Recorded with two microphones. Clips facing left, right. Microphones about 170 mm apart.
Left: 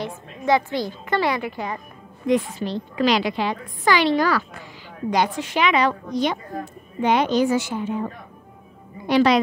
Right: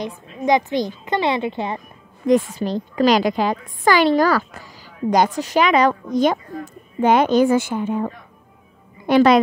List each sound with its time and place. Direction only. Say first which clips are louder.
0.0 s a woman's voice: right 3 dB; 15° right (ahead or behind)
2.2 s a woman's voice: right 4 dB; 45° right (ahead or behind)
9.0 s a woman's voice: right 4 dB; 50° right (ahead or behind)